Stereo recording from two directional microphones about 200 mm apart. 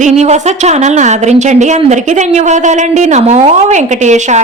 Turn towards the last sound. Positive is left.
turn(degrees=-35)  # may be behind; listen again after turning